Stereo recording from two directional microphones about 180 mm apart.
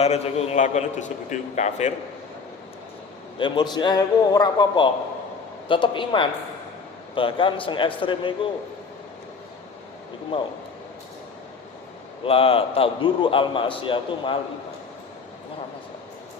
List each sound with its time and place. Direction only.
0.0 s a man's voice: 35° left (ahead or behind)
3.3 s a man's voice: 25° left (ahead or behind)
12.2 s a man's voice: 30° left (ahead or behind)